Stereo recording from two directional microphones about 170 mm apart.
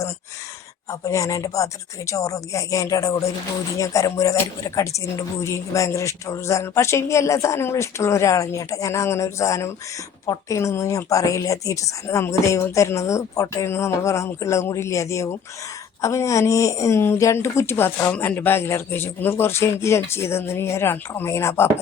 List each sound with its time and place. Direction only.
0.9 s speech: 20° left (ahead or behind)